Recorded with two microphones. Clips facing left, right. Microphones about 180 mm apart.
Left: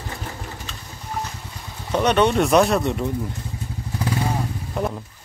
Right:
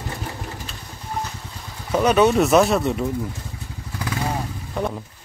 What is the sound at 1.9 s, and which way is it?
Speech, 5° right (ahead or behind).